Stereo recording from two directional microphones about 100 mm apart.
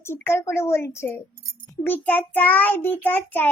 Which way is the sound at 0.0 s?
25° left (ahead or behind).